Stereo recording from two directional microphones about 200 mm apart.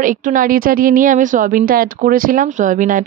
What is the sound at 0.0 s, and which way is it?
A woman's voice, 40° right (ahead or behind).